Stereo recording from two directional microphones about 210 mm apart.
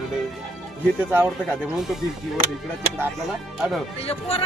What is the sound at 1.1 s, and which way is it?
Speech, 10° right (ahead or behind).